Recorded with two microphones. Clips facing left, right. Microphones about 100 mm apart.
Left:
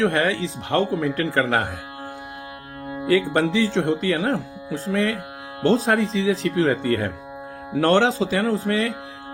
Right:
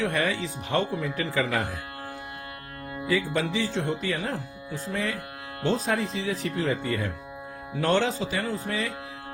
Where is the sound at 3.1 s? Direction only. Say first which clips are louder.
Left 7 dB; 70° left (ahead or behind).